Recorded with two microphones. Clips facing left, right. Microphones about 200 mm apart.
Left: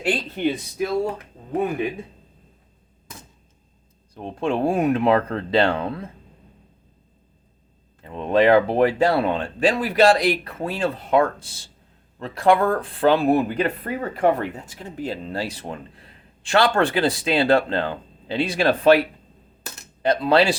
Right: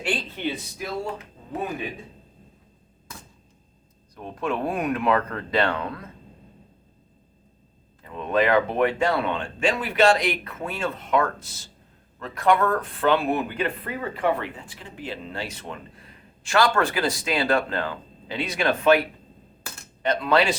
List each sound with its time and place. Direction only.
0.0 s speech: 45° left (ahead or behind)
4.1 s speech: 30° left (ahead or behind)
8.0 s speech: 30° left (ahead or behind)
20.0 s speech: 30° left (ahead or behind)